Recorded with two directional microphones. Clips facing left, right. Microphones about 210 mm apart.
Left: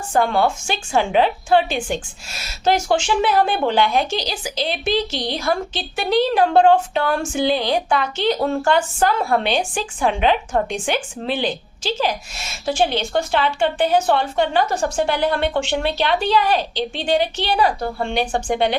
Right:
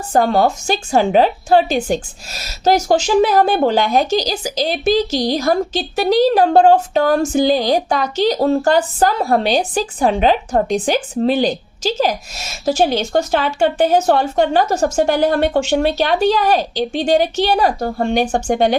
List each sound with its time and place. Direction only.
0.1 s a woman's voice: 40° right (ahead or behind)